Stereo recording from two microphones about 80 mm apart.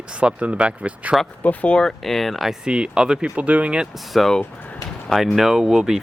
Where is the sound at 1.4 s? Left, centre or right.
Centre.